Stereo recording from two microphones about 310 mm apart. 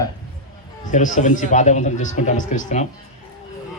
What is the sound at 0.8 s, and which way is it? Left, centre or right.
Speech, left.